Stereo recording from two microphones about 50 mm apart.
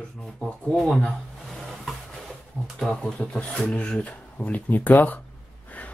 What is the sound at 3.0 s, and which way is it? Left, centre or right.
Speech, left.